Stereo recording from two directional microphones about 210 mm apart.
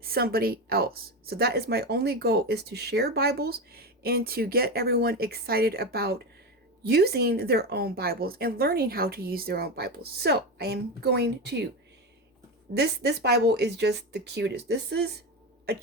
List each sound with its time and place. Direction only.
0.0 s speech: 45° right (ahead or behind)
12.7 s speech: 50° right (ahead or behind)